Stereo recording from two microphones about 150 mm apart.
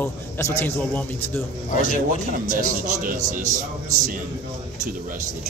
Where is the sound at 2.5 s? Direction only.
60° right (ahead or behind).